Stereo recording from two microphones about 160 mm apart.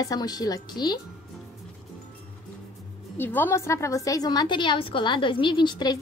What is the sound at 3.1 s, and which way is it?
A woman's voice, 15° left (ahead or behind).